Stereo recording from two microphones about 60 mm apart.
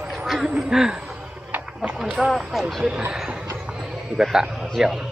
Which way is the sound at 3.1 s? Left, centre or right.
Centre.